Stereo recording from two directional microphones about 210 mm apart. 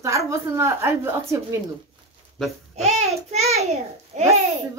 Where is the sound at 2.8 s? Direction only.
30° right (ahead or behind).